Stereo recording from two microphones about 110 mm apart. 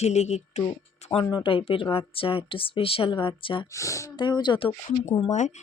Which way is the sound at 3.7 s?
30° left (ahead or behind).